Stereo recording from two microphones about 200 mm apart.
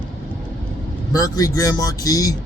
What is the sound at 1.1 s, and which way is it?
Speech, 20° left (ahead or behind).